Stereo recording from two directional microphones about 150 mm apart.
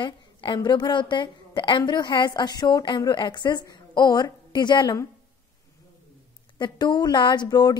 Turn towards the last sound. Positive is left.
turn(degrees=25)  # may be behind; listen again after turning